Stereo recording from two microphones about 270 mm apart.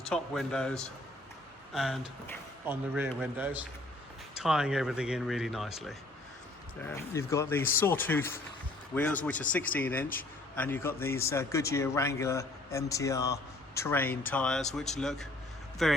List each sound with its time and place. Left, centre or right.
0.1 s speech: centre
6.8 s a man's voice: centre